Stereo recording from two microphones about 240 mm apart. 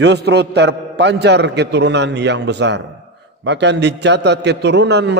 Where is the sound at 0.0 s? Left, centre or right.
Right.